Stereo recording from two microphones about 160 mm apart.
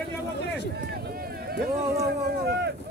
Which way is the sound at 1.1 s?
70° right (ahead or behind).